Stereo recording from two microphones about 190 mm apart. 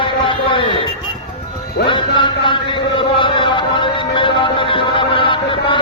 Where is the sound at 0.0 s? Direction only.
25° left (ahead or behind).